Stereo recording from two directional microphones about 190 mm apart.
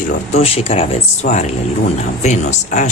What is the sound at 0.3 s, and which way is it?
Speech, 30° left (ahead or behind).